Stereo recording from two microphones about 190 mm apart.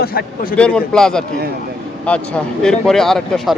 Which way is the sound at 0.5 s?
5° left (ahead or behind).